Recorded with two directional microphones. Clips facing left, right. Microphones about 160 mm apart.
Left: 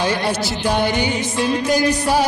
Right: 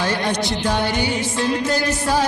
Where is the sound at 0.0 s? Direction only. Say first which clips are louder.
Left 1 dB; 15° left (ahead or behind).